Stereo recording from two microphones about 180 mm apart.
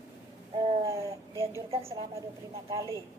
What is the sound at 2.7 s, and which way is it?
Speech, 15° right (ahead or behind).